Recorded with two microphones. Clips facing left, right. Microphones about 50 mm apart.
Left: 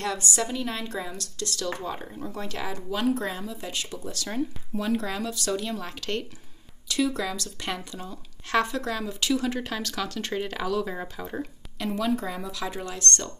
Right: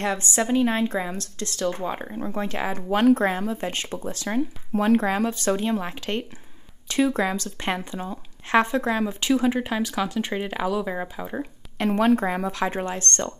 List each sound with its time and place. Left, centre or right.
0.0 s speech: right
4.7 s speech: right; by 11.2 s centre
11.8 s speech: right